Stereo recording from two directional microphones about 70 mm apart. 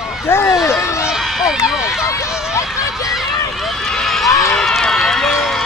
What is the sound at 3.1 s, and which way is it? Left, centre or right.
Run, centre.